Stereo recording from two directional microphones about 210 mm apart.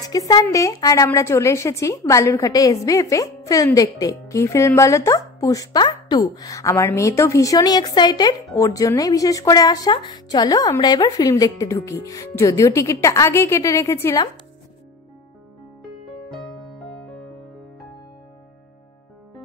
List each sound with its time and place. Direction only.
0.0 s a woman's voice: 20° left (ahead or behind)